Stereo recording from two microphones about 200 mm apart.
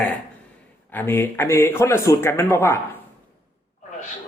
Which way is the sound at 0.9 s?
10° left (ahead or behind).